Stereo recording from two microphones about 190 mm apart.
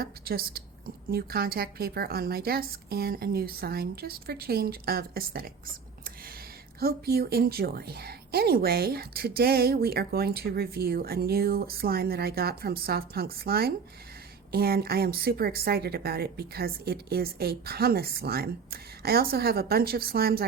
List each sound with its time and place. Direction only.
0.0 s a woman's voice: 55° right (ahead or behind)
6.7 s a woman's voice: 55° right (ahead or behind)